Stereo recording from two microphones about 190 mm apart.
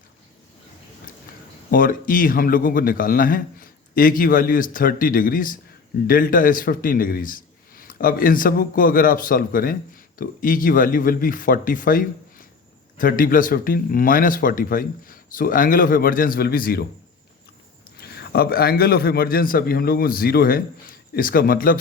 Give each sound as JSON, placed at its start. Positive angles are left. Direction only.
{"t": 1.3, "sound": "a sound", "side_deg": 50}
{"t": 1.7, "sound": "a man's voice", "side_deg": 45}
{"t": 17.9, "sound": "a man's voice", "side_deg": 55}